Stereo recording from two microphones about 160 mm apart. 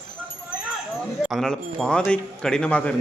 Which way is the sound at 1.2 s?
Centre (ahead or behind).